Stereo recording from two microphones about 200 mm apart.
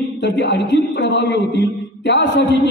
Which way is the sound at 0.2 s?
60° left (ahead or behind).